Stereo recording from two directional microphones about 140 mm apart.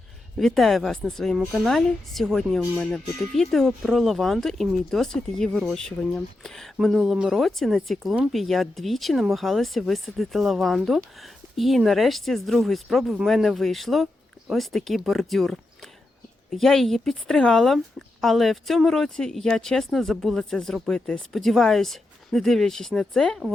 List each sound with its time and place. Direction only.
0.3 s speech: centre (ahead or behind)